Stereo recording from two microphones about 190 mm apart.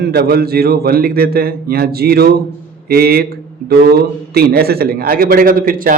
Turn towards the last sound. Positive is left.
turn(degrees=-50)  # may be behind; listen again after turning